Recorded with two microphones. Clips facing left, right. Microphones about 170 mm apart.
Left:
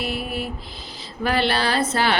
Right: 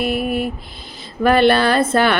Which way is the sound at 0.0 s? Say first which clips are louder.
Right 8 dB; 55° right (ahead or behind).